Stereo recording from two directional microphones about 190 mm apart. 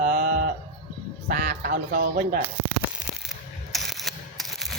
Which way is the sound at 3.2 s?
Centre (ahead or behind).